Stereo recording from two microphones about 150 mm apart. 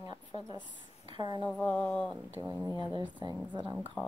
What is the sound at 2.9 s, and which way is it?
Speech, 30° right (ahead or behind).